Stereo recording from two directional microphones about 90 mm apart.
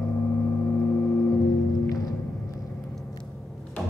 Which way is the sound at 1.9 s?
40° left (ahead or behind).